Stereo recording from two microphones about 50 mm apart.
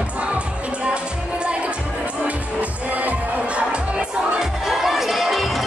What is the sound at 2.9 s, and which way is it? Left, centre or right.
Music, right.